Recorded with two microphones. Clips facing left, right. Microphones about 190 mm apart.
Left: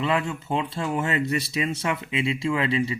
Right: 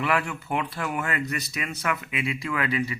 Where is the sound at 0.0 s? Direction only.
20° left (ahead or behind).